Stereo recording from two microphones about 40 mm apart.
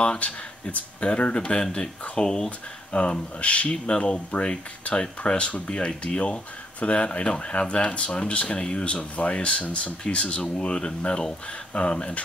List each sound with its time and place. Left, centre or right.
0.0 s speech: left
1.8 s speech: centre
2.9 s speech: left
3.7 s speech: left